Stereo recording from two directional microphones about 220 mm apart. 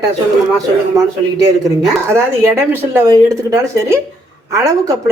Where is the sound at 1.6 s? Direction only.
15° right (ahead or behind).